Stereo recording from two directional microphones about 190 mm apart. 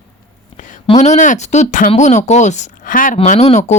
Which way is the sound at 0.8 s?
35° left (ahead or behind).